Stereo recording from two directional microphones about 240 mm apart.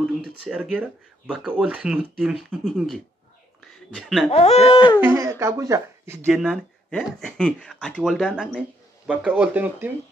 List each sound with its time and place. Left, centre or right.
0.2 s speech: centre
4.3 s speech: left
5.0 s speech: centre
6.2 s speech: centre